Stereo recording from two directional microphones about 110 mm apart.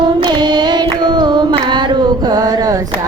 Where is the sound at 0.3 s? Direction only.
40° right (ahead or behind).